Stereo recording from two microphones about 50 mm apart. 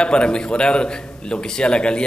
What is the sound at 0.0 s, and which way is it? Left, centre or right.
Speech, centre.